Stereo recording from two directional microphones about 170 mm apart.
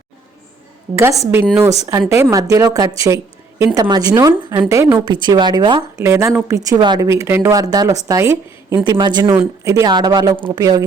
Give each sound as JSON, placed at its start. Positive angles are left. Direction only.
{"t": 0.9, "sound": "a woman's voice", "side_deg": -15}
{"t": 6.0, "sound": "a woman's voice", "side_deg": -15}